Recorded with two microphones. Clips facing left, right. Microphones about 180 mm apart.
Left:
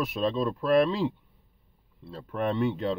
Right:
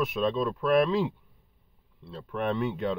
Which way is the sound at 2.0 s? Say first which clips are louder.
Left 1 dB; 40° left (ahead or behind).